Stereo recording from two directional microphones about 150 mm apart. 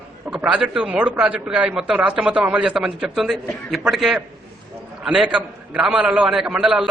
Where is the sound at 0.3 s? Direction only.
5° right (ahead or behind).